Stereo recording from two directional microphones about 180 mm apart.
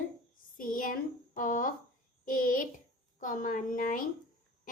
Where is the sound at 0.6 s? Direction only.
50° left (ahead or behind).